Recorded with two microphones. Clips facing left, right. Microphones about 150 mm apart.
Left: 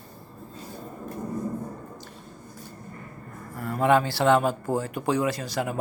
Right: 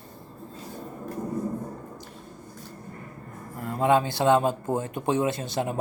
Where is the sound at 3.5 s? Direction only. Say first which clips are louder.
Left 1 dB; 20° right (ahead or behind).